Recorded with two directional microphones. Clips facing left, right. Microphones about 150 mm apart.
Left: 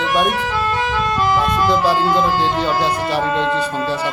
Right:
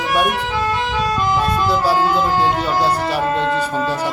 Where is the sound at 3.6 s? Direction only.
10° right (ahead or behind).